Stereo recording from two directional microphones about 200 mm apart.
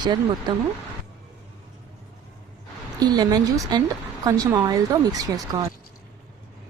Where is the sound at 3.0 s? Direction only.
20° right (ahead or behind).